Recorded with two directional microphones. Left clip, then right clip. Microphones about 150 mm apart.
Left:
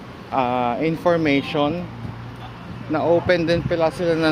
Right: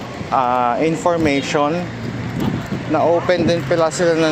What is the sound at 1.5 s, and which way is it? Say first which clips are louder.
Speech: right 4 dB; 25° left (ahead or behind).